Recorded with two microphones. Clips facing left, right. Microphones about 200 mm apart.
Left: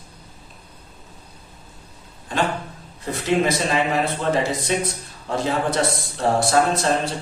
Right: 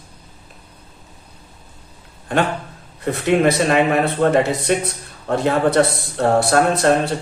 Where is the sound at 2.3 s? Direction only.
60° right (ahead or behind).